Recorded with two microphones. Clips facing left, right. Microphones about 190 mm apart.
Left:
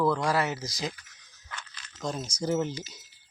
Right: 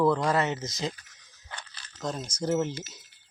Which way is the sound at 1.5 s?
35° right (ahead or behind).